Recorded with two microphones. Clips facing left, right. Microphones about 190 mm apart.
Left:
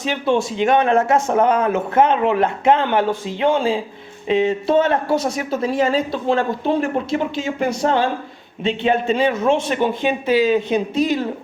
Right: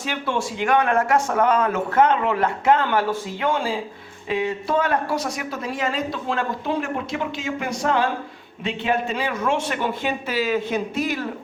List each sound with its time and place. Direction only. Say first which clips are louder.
0.0 s speech: left 6 dB; 20° left (ahead or behind)